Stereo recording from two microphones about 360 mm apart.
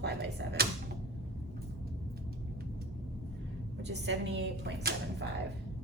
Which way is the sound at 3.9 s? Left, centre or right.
Right.